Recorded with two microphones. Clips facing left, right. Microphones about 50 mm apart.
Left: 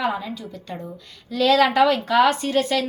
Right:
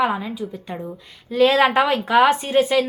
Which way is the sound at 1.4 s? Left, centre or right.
Right.